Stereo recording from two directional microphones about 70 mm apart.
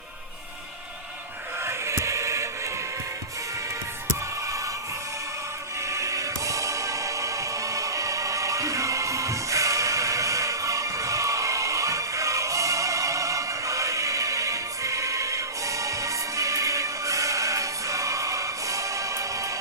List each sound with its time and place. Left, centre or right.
1.6 s music: right
4.4 s music: right
5.8 s music: right